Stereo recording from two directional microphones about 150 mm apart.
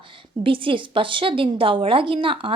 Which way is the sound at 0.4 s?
35° right (ahead or behind).